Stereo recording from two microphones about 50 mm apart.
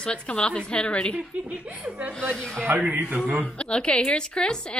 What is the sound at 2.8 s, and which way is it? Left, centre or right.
Speech, right.